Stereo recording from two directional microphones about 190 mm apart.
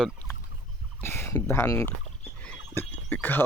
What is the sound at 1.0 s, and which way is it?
Speech, 10° left (ahead or behind).